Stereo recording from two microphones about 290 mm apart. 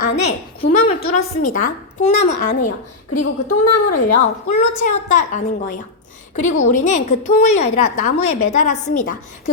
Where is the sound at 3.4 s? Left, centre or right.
Left.